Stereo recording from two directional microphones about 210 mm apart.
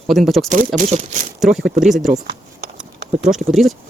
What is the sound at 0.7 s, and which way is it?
Speech, 35° right (ahead or behind).